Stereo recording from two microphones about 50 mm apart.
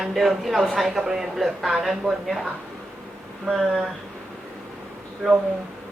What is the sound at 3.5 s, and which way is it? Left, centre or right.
Speech, centre.